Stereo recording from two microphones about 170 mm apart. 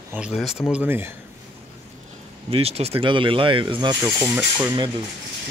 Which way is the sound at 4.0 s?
10° right (ahead or behind).